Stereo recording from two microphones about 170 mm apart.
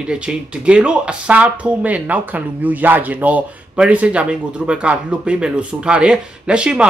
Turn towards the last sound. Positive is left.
turn(degrees=-5)  # may be behind; listen again after turning